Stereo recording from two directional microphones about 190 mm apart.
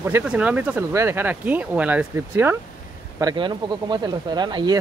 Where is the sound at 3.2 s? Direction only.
20° right (ahead or behind).